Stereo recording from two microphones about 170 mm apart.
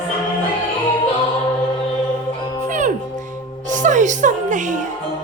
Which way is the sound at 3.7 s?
45° right (ahead or behind).